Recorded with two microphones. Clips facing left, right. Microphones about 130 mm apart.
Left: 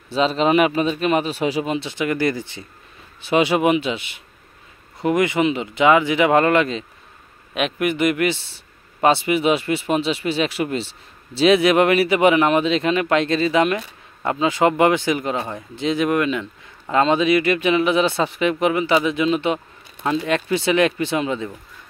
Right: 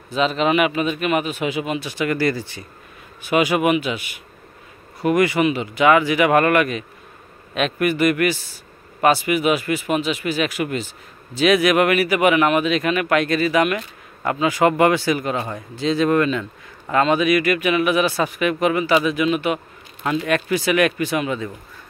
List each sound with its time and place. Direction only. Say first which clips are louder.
0.1 s a man's voice: left 1 dB; 30° left (ahead or behind)